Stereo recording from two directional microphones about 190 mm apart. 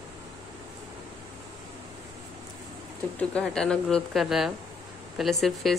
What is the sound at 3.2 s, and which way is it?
A woman's voice, 5° left (ahead or behind).